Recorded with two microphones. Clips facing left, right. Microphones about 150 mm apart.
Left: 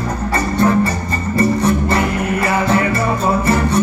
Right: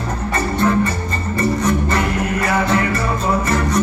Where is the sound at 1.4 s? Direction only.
30° left (ahead or behind).